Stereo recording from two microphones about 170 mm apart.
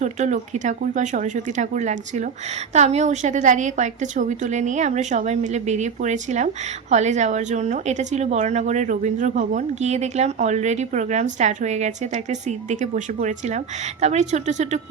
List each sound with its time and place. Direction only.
0.0 s a woman's voice: 45° right (ahead or behind)